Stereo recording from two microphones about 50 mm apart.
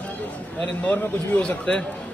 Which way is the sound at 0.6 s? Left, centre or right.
Left.